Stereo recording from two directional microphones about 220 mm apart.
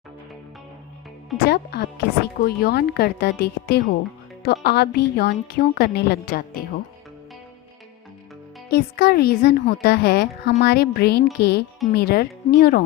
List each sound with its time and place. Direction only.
1.5 s speech: 45° left (ahead or behind)
8.7 s speech: 45° left (ahead or behind)